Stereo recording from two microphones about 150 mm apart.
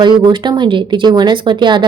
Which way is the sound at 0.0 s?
30° right (ahead or behind).